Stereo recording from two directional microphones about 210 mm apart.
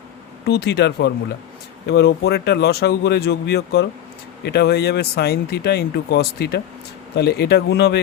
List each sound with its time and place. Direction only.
0.4 s speech: 55° left (ahead or behind)